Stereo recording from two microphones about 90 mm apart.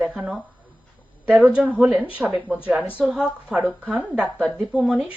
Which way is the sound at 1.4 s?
15° right (ahead or behind).